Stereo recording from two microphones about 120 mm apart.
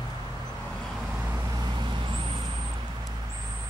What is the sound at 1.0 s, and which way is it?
Vehicle, 10° right (ahead or behind).